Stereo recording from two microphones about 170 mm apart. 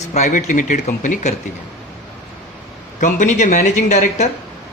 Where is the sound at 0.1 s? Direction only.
45° left (ahead or behind).